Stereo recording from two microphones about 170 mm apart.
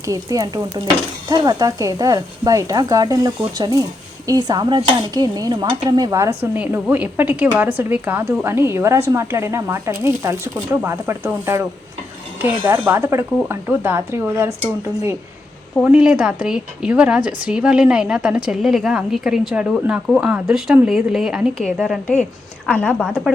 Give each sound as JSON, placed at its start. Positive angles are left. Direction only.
{"t": 0.0, "sound": "stir", "side_deg": -20}
{"t": 7.6, "sound": "a woman's voice", "side_deg": -10}